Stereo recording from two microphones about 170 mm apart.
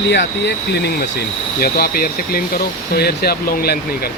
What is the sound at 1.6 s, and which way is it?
Speech, 60° left (ahead or behind).